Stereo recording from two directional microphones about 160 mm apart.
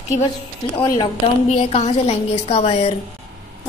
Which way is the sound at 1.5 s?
40° left (ahead or behind).